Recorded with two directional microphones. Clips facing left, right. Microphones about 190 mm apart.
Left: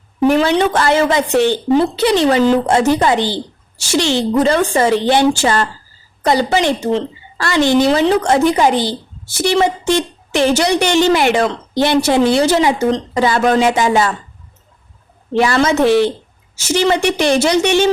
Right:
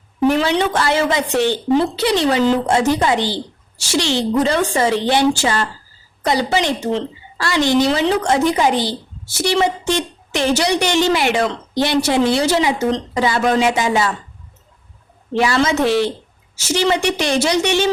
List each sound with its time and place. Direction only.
0.3 s a woman's voice: 50° left (ahead or behind)
15.4 s a woman's voice: 50° left (ahead or behind)